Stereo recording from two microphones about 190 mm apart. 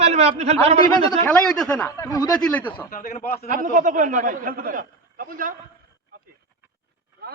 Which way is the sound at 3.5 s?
45° right (ahead or behind).